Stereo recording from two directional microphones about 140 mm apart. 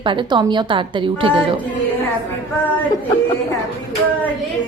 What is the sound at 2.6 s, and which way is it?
Speech, 10° left (ahead or behind).